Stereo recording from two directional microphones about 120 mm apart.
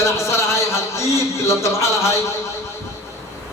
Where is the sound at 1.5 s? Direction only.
25° left (ahead or behind).